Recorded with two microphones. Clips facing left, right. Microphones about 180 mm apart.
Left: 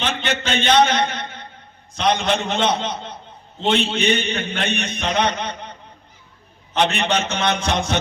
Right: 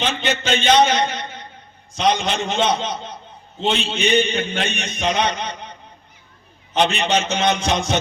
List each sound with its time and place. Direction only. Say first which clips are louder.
0.0 s a man's voice: right 1 dB; 60° left (ahead or behind)
0.9 s a sound: right 1 dB; 55° left (ahead or behind)
2.0 s a man's voice: even; 60° left (ahead or behind)
6.8 s a man's voice: right 1 dB; 60° left (ahead or behind)